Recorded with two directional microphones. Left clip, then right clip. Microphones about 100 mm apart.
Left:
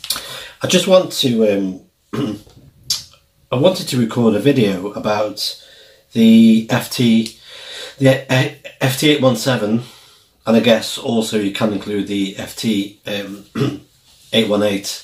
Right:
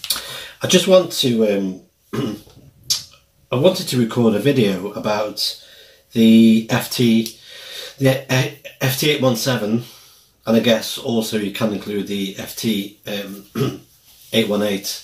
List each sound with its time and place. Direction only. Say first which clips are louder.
0.3 s speech: even; centre (ahead or behind)
3.4 s speech: left 1 dB; 5° left (ahead or behind)